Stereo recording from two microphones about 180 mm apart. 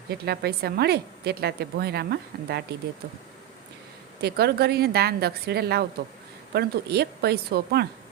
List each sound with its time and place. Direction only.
0.1 s a woman's voice: 65° right (ahead or behind)
4.2 s a woman's voice: 60° right (ahead or behind)